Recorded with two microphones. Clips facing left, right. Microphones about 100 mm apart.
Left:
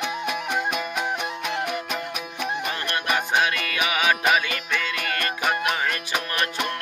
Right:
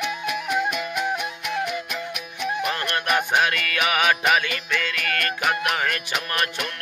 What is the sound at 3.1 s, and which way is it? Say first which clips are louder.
Music: right 1 dB; 20° left (ahead or behind).